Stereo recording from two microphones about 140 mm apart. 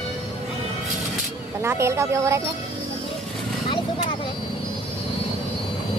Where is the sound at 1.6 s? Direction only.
20° right (ahead or behind).